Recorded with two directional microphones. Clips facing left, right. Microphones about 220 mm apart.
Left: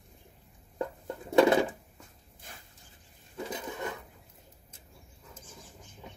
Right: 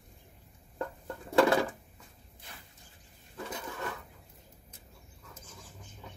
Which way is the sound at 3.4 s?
20° left (ahead or behind).